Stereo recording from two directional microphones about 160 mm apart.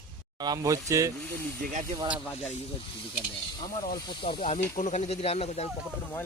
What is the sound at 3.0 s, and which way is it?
Speech, 35° left (ahead or behind).